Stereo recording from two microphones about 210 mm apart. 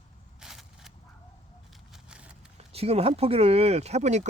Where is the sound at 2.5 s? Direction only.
30° right (ahead or behind).